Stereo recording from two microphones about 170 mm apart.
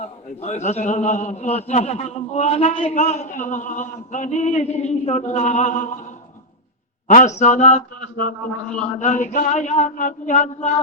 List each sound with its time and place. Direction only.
0.4 s a man's voice: 40° left (ahead or behind)
7.1 s a man's voice: 40° left (ahead or behind)
9.0 s a man's voice: 45° left (ahead or behind)